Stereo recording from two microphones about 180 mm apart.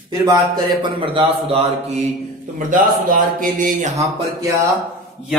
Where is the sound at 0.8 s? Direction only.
30° right (ahead or behind).